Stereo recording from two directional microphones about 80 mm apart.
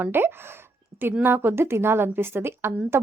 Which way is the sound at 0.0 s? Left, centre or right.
Right.